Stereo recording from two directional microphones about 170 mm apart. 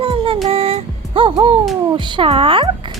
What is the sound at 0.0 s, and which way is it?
Music, 30° right (ahead or behind).